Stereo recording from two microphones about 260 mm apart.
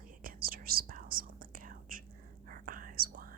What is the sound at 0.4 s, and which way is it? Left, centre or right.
Whispering, right.